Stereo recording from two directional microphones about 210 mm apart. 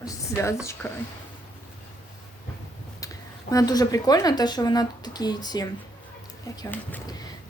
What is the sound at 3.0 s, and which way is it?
A woman's voice, 15° left (ahead or behind).